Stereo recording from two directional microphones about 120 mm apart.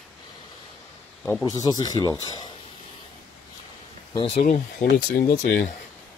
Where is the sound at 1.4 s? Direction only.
30° left (ahead or behind).